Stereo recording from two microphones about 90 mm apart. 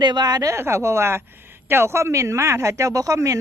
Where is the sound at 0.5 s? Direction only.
30° right (ahead or behind).